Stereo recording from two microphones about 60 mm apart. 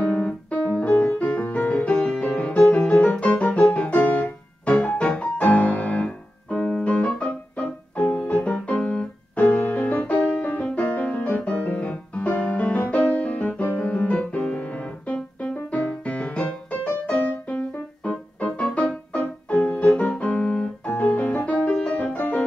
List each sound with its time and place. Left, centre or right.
0.0 s piano: left
1.1 s music: left